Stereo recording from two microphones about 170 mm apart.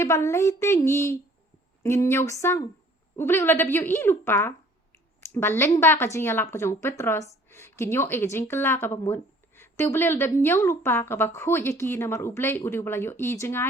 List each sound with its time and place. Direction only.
0.0 s speech: 15° left (ahead or behind)